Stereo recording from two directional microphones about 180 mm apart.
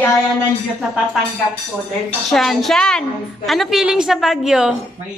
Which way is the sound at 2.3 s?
Centre (ahead or behind).